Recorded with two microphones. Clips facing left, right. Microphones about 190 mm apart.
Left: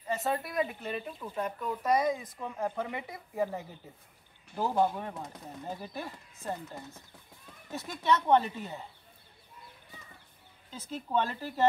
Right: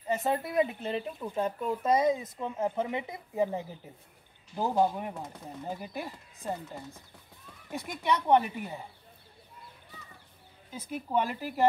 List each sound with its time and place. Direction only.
0.1 s speech: 20° right (ahead or behind)
10.7 s speech: 10° right (ahead or behind)